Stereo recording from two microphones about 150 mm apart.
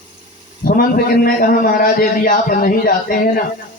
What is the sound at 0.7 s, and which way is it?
A man's voice, 75° left (ahead or behind).